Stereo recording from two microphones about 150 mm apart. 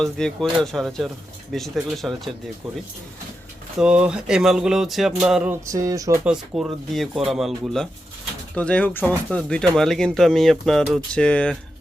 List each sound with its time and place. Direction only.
0.0 s speech: 5° left (ahead or behind)
3.8 s speech: 5° right (ahead or behind)
5.6 s speech: 20° right (ahead or behind)
6.2 s speech: 5° right (ahead or behind)